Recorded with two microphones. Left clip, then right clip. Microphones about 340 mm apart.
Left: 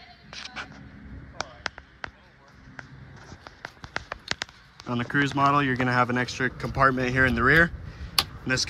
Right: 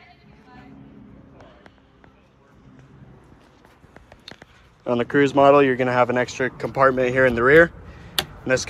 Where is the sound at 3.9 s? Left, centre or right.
Right.